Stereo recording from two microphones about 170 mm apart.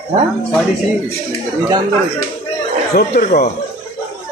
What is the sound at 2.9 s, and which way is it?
Speech, 65° left (ahead or behind).